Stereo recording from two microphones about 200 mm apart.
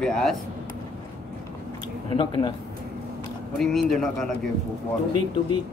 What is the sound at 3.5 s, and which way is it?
Speech, centre (ahead or behind).